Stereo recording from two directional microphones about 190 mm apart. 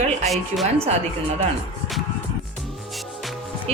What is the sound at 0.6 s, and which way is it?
Speech, 35° right (ahead or behind).